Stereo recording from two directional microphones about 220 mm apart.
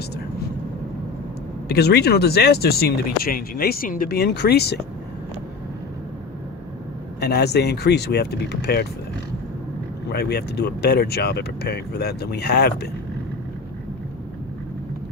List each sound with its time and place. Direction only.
1.6 s speech: 45° left (ahead or behind)
7.2 s speech: 45° left (ahead or behind)
10.1 s speech: 45° left (ahead or behind)